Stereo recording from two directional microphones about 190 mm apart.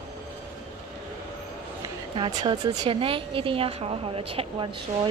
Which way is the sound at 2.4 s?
25° right (ahead or behind).